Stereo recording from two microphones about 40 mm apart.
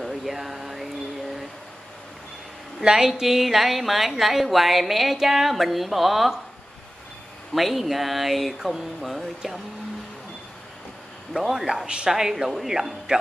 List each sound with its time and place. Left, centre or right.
0.0 s a sound: centre
2.8 s a woman's voice: centre
7.5 s a woman's voice: centre
11.3 s speech: centre